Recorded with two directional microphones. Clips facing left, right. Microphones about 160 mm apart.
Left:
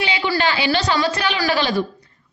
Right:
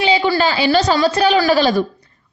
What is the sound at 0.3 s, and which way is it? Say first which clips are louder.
A woman's voice: right 5 dB; 35° right (ahead or behind).